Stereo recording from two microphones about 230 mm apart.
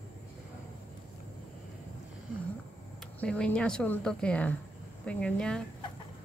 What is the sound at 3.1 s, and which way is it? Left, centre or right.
Speech, centre.